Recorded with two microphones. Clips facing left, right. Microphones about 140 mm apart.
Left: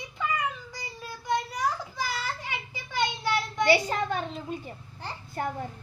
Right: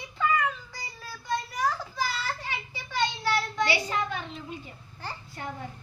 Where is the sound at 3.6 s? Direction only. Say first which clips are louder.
Left 8 dB; 45° left (ahead or behind).